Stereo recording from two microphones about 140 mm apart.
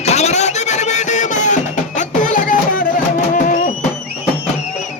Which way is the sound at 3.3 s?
65° left (ahead or behind).